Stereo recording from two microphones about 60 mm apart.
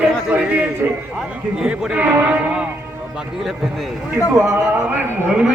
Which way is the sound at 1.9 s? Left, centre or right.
Right.